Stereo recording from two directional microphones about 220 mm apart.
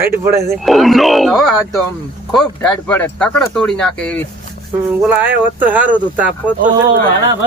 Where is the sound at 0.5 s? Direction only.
Centre (ahead or behind).